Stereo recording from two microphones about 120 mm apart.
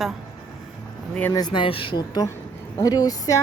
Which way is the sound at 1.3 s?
35° left (ahead or behind).